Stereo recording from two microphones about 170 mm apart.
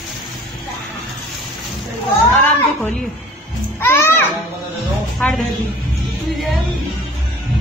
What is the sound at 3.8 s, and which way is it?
Speech, 15° left (ahead or behind).